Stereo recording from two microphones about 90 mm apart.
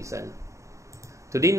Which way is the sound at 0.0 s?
35° right (ahead or behind).